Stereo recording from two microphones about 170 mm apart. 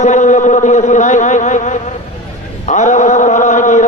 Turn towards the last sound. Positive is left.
turn(degrees=45)  # may be behind; listen again after turning